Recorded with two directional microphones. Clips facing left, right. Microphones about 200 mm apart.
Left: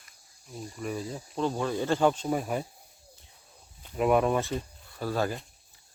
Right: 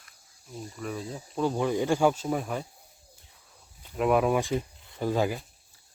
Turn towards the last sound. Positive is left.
turn(degrees=-15)  # may be behind; listen again after turning